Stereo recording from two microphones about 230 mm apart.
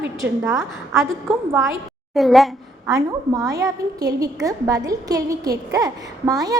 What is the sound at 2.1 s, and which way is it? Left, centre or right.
Speech, centre.